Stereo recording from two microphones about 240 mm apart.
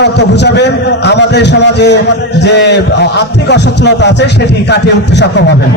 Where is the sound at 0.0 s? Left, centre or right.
Left.